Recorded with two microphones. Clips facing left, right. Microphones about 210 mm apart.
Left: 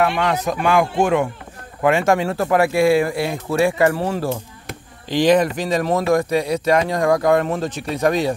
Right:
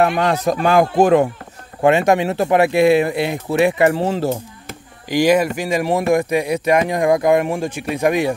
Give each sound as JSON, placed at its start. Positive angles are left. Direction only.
{"t": 0.0, "sound": "speech", "side_deg": -40}
{"t": 1.8, "sound": "speech", "side_deg": -20}
{"t": 5.1, "sound": "speech", "side_deg": -10}